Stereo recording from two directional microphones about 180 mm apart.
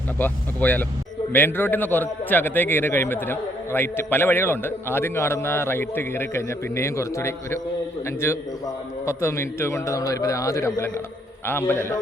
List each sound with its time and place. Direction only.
0.2 s a man's voice: 10° left (ahead or behind)